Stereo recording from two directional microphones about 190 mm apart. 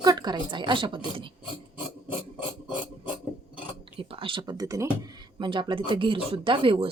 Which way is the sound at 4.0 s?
30° right (ahead or behind).